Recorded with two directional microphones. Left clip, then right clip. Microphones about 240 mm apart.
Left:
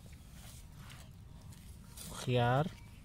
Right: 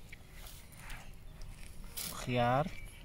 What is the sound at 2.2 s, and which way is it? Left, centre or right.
Speech, left.